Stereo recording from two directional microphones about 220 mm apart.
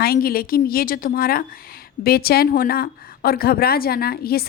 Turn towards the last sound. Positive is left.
turn(degrees=45)  # may be behind; listen again after turning